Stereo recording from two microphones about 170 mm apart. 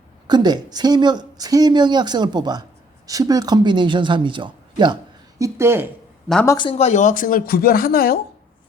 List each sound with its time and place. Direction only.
0.3 s speech: 25° right (ahead or behind)
5.4 s speech: 15° right (ahead or behind)
6.6 s speech: 35° left (ahead or behind); by 8.2 s 60° left (ahead or behind)